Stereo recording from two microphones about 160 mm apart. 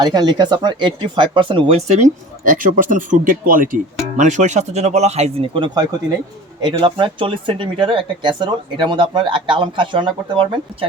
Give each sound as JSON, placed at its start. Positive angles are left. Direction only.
{"t": 0.0, "sound": "speech", "side_deg": -25}